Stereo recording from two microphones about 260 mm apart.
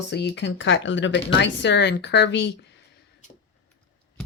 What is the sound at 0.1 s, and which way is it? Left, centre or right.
Speech, left.